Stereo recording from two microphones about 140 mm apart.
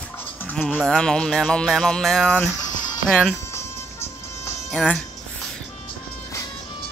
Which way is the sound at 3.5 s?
20° left (ahead or behind).